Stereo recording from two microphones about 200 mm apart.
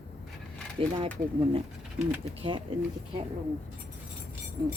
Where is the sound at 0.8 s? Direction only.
25° right (ahead or behind).